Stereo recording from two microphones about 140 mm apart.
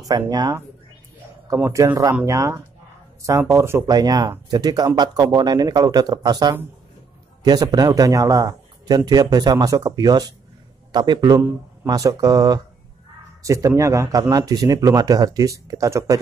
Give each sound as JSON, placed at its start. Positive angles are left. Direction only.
{"t": 0.0, "sound": "speech", "side_deg": -30}